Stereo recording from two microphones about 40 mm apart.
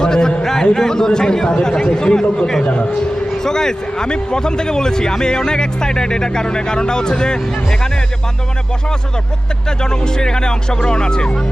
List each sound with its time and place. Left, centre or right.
0.0 s speech: centre
0.4 s a sound: centre
0.8 s a man's voice: centre
9.6 s speech: centre